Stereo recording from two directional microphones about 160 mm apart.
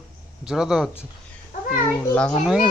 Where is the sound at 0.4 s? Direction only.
5° right (ahead or behind).